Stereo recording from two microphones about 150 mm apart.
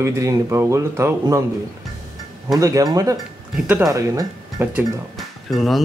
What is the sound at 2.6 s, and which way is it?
Speech, 25° right (ahead or behind).